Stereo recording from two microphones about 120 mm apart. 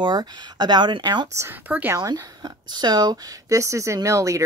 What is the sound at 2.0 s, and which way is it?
Speech, 30° right (ahead or behind).